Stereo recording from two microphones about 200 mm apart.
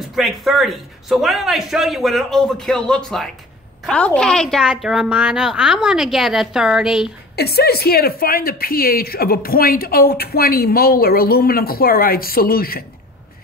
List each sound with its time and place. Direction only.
0.1 s a woman's voice: centre (ahead or behind)
7.3 s a woman's voice: 50° left (ahead or behind)